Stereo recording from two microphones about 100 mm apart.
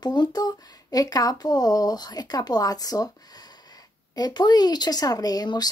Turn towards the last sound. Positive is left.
turn(degrees=45)  # may be behind; listen again after turning